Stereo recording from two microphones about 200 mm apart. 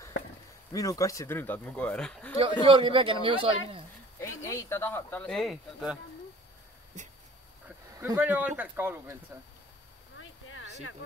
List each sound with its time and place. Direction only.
0.7 s speech: 15° left (ahead or behind)
2.6 s a man's voice: 25° right (ahead or behind)
4.2 s speech: 15° left (ahead or behind); by 5.9 s centre (ahead or behind)
7.6 s speech: 10° right (ahead or behind)
10.1 s a sound: 75° left (ahead or behind)